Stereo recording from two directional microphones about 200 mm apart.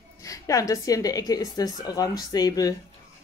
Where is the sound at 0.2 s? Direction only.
15° left (ahead or behind).